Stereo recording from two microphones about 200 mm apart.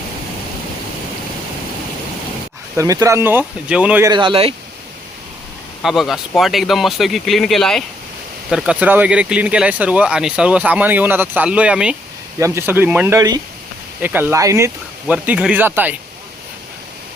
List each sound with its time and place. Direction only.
2.7 s speech: 15° right (ahead or behind)
4.1 s speech: 25° right (ahead or behind)
5.8 s speech: centre (ahead or behind)